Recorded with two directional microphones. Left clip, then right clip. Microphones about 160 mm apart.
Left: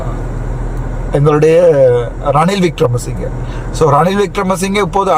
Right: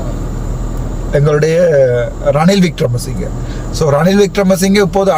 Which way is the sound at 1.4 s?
15° left (ahead or behind).